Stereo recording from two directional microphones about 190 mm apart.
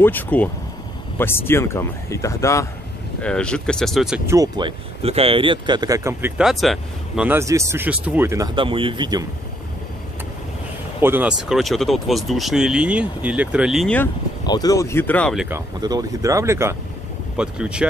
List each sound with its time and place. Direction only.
0.0 s speech: 10° left (ahead or behind)
4.3 s speech: 20° right (ahead or behind)
11.0 s speech: 10° right (ahead or behind)
14.4 s speech: 20° left (ahead or behind); by 15.4 s 5° left (ahead or behind)
15.8 s speech: 20° right (ahead or behind)